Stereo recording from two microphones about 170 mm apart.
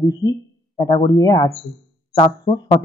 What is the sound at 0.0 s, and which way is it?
Speech, 20° left (ahead or behind).